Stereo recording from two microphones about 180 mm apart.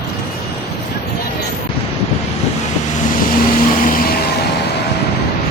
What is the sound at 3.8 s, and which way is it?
Vehicle, 50° left (ahead or behind).